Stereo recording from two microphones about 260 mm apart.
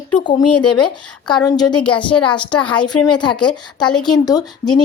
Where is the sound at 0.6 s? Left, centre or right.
Left.